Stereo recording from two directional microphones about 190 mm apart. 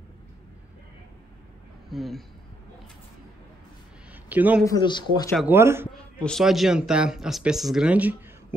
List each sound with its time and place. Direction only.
1.9 s speech: centre (ahead or behind)
4.1 s a sound: 10° right (ahead or behind)
4.6 s speech: 20° left (ahead or behind)
5.4 s speech: 10° right (ahead or behind)
5.9 s a man's voice: 5° left (ahead or behind)